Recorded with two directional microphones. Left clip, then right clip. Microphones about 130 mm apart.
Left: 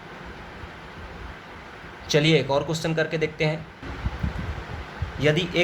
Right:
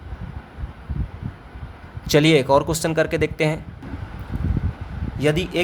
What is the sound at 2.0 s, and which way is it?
Speech, 75° right (ahead or behind).